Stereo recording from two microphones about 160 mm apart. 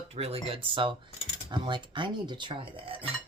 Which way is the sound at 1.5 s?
30° right (ahead or behind).